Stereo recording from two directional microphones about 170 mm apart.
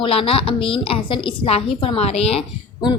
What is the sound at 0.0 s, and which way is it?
A woman's voice, 35° left (ahead or behind).